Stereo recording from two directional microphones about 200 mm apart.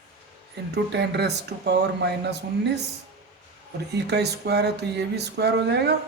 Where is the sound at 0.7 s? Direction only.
55° right (ahead or behind).